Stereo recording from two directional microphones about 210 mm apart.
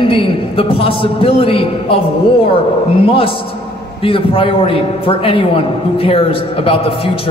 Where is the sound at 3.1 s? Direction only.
25° left (ahead or behind).